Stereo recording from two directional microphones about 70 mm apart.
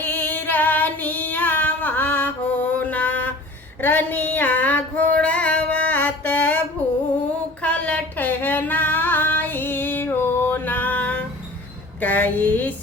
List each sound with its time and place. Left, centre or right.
0.0 s female singing: left
7.6 s female singing: centre
11.9 s a sound: left